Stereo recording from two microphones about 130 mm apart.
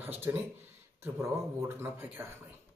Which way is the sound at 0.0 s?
15° right (ahead or behind).